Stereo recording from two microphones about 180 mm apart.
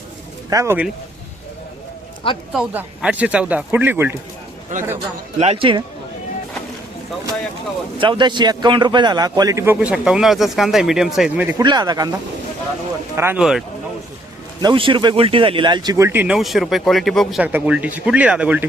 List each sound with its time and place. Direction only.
0.5 s speech: 15° right (ahead or behind)
2.5 s speech: 5° right (ahead or behind)
4.7 s a man's voice: 45° right (ahead or behind)
5.4 s speech: 35° right (ahead or behind)
7.9 s speech: 25° right (ahead or behind); by 11.5 s 10° right (ahead or behind)
11.5 s speech: 25° right (ahead or behind)
13.1 s speech: 15° right (ahead or behind)
14.6 s speech: 25° right (ahead or behind); by 18.7 s 10° right (ahead or behind)